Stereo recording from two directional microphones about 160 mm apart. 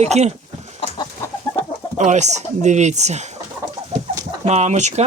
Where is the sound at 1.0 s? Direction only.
15° left (ahead or behind).